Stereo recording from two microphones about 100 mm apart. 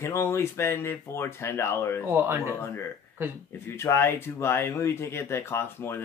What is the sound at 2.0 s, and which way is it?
Speech, 25° right (ahead or behind).